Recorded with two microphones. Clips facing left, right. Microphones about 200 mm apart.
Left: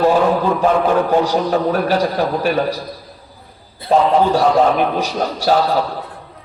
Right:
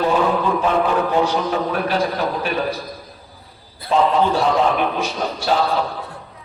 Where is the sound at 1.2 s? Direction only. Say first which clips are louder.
Left 3 dB; 40° left (ahead or behind).